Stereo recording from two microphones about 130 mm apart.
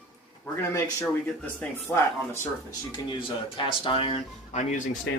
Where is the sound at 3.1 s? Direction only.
40° left (ahead or behind); by 4.8 s 60° left (ahead or behind).